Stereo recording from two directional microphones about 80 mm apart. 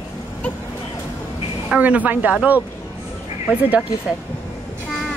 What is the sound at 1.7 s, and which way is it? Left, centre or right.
Speech, centre.